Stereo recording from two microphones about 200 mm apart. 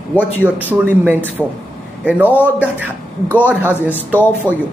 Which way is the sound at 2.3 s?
10° right (ahead or behind).